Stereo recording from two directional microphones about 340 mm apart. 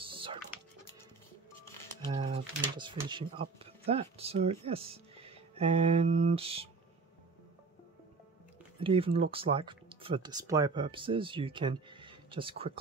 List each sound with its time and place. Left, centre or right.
0.0 s typing: centre
2.0 s a sound: centre
2.8 s speech: centre
8.8 s speech: centre